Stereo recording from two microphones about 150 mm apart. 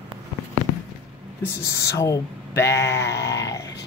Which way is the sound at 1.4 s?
20° left (ahead or behind).